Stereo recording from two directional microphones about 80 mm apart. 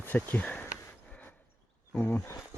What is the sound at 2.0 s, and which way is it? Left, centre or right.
Speech, left.